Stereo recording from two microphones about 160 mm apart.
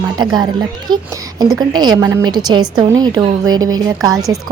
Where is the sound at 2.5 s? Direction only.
25° right (ahead or behind).